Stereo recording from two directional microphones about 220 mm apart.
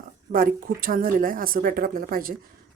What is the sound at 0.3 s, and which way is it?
A woman's voice, 40° right (ahead or behind).